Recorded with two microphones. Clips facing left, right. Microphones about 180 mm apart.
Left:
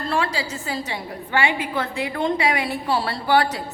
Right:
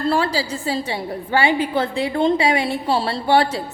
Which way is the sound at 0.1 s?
35° right (ahead or behind).